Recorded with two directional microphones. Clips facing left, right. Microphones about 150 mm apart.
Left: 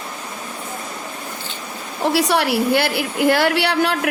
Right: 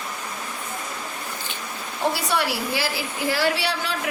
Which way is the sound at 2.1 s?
65° left (ahead or behind).